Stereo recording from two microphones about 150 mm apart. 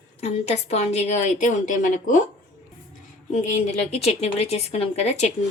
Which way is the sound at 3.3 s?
55° left (ahead or behind).